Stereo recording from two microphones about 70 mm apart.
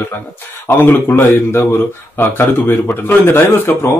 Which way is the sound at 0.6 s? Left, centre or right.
Left.